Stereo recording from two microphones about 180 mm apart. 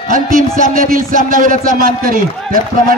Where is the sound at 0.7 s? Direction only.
50° right (ahead or behind).